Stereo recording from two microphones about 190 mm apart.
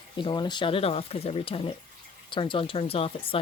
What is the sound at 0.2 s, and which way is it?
Speech, 25° left (ahead or behind).